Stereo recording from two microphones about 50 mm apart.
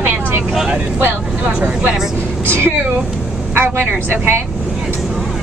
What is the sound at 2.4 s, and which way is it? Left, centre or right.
Speech, right.